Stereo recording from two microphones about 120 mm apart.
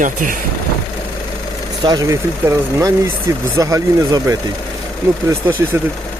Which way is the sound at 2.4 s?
15° right (ahead or behind).